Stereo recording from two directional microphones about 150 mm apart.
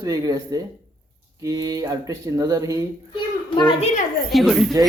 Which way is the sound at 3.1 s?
30° left (ahead or behind).